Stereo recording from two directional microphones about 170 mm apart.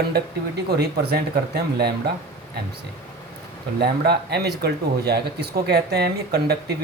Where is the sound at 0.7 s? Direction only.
70° right (ahead or behind).